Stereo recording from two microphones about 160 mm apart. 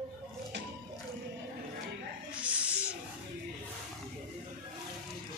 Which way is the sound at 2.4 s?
10° right (ahead or behind).